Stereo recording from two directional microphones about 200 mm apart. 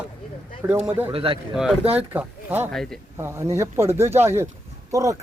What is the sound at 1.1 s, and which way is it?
Speech, 30° right (ahead or behind).